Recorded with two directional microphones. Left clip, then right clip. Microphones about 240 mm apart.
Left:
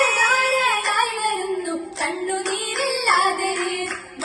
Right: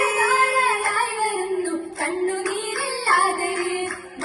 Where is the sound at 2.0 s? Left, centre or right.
Right.